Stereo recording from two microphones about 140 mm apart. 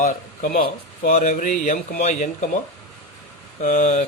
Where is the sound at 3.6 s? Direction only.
65° left (ahead or behind).